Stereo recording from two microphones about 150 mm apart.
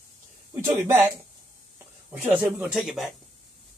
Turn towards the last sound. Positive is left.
turn(degrees=-5)  # may be behind; listen again after turning